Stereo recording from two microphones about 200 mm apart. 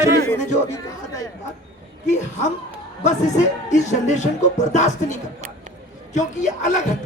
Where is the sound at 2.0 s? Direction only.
35° left (ahead or behind).